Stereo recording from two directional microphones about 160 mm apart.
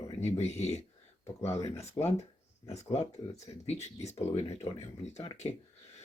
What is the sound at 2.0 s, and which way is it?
Speech, 25° left (ahead or behind).